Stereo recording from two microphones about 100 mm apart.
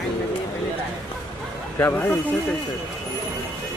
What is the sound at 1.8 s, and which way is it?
Speech, 20° left (ahead or behind).